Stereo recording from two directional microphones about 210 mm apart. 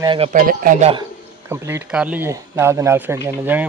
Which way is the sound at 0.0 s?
20° right (ahead or behind).